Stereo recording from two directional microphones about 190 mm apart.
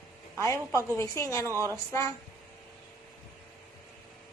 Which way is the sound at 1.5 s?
15° right (ahead or behind).